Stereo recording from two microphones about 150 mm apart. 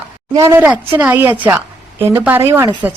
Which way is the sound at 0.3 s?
20° right (ahead or behind).